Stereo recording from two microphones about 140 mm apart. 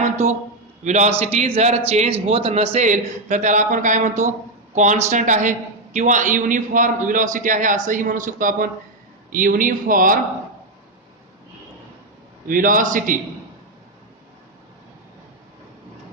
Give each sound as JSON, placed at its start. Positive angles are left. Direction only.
{"t": 0.0, "sound": "a sound", "side_deg": -60}
{"t": 0.9, "sound": "speech", "side_deg": -55}
{"t": 2.7, "sound": "a woman's voice", "side_deg": -60}
{"t": 12.5, "sound": "a woman's voice", "side_deg": -75}